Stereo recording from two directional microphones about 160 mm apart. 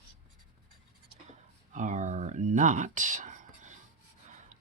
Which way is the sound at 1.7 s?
50° right (ahead or behind).